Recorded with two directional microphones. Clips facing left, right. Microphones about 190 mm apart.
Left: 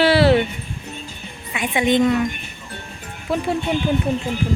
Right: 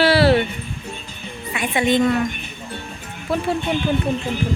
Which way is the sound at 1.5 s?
15° left (ahead or behind).